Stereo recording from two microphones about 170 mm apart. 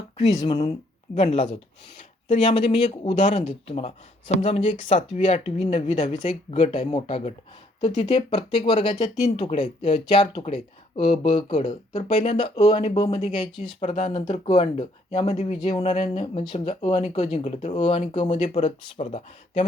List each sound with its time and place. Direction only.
0.4 s speech: 30° left (ahead or behind)
9.5 s speech: 40° left (ahead or behind)
13.2 s speech: 40° left (ahead or behind)